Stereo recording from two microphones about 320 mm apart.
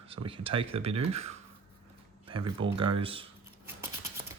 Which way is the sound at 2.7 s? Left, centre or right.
Centre.